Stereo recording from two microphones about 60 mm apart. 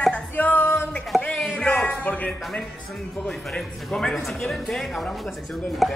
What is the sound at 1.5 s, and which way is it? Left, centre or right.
Music, centre.